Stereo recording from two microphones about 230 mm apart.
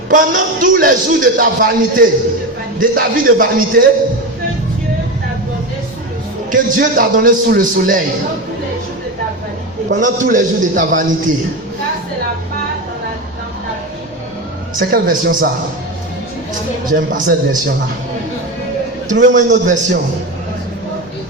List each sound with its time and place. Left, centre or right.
0.1 s a man's voice: right
6.5 s a man's voice: right
10.0 s a man's voice: right
14.8 s a man's voice: right
16.9 s a man's voice: right
19.3 s a man's voice: right